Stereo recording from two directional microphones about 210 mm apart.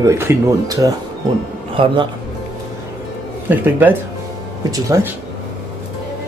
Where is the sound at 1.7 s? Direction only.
25° right (ahead or behind).